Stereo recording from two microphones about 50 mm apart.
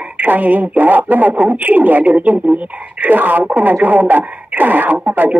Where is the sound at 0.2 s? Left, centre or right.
Right.